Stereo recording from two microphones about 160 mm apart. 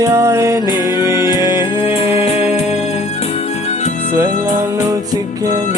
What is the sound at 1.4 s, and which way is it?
Music, 20° right (ahead or behind).